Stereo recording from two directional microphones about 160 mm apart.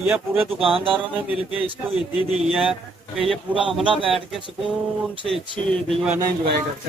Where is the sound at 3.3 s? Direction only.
30° right (ahead or behind).